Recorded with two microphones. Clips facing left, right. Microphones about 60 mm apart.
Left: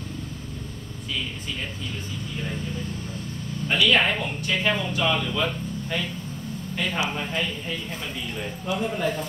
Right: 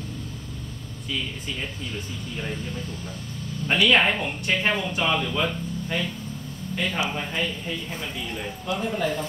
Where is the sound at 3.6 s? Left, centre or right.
Right.